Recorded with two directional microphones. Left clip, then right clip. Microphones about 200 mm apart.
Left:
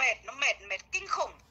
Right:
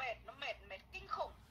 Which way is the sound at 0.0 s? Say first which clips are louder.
Left 16 dB; 45° left (ahead or behind).